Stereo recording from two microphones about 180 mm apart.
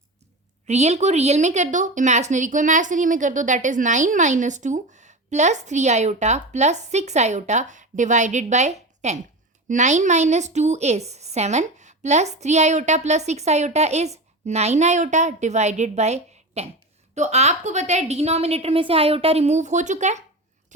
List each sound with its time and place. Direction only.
0.7 s speech: 35° right (ahead or behind)